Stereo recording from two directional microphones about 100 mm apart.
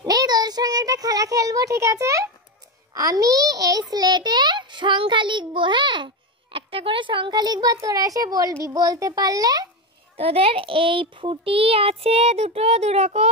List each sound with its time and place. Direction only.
0.0 s child singing: 40° right (ahead or behind)
2.9 s a sound: 35° right (ahead or behind)
10.1 s a child's voice: 80° right